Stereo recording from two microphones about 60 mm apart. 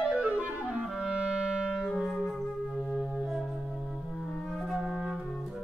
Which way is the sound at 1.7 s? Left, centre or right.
Centre.